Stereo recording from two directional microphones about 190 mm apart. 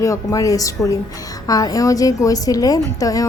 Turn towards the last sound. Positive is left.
turn(degrees=20)  # may be behind; listen again after turning